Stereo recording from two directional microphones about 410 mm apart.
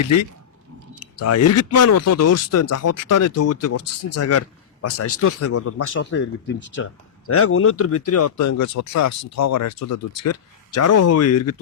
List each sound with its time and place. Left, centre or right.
1.2 s speech: left